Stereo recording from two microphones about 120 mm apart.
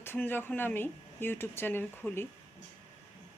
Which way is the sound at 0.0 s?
15° left (ahead or behind).